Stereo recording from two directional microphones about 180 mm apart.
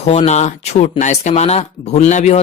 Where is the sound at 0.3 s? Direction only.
40° left (ahead or behind).